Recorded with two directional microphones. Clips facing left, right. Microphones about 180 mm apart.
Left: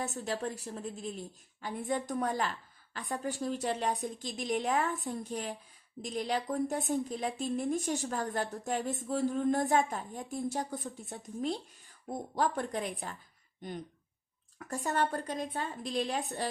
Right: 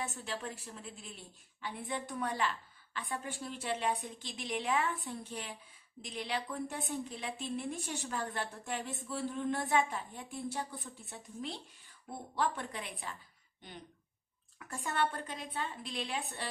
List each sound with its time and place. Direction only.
0.0 s a woman's voice: 40° left (ahead or behind)